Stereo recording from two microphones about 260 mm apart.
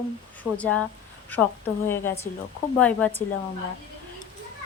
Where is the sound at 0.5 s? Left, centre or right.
Centre.